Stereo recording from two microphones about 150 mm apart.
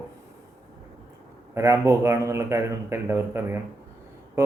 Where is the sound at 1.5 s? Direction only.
20° right (ahead or behind).